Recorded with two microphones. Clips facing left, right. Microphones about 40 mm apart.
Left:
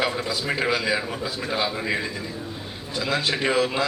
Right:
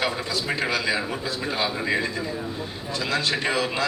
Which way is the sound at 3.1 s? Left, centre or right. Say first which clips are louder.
Left 2 dB; centre.